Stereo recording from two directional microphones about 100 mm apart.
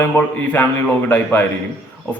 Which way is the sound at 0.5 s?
15° left (ahead or behind).